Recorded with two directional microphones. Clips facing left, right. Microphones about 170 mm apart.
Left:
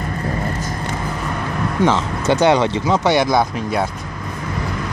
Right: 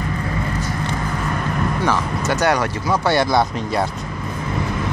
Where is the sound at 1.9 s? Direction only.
25° left (ahead or behind).